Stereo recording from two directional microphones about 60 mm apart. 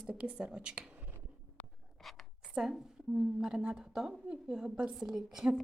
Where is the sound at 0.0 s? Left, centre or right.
Centre.